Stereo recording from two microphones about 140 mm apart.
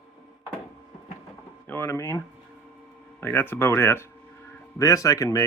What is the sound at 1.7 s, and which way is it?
Speech, 15° left (ahead or behind).